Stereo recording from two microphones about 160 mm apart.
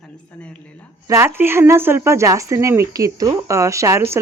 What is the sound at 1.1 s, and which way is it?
Speech, 15° right (ahead or behind).